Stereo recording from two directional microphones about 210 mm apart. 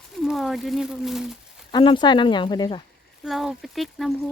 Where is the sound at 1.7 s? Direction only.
20° left (ahead or behind).